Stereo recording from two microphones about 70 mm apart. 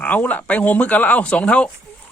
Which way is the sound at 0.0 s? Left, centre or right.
Left.